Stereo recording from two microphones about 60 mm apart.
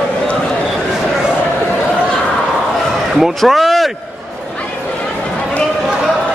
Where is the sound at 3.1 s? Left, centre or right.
Centre.